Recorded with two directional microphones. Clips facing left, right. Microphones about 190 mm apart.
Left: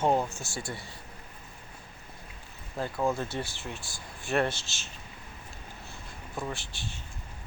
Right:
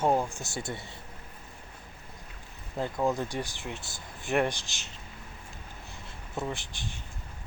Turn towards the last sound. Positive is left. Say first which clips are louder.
# right 1 dB
turn(degrees=-15)  # may be behind; listen again after turning